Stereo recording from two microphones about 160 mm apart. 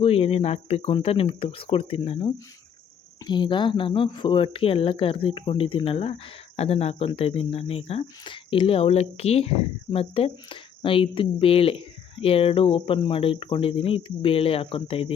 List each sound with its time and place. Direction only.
0.0 s speech: 40° left (ahead or behind)